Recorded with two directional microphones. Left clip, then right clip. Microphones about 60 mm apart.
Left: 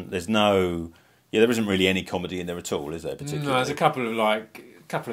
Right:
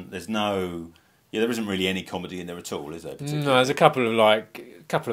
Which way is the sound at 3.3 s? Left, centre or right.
Right.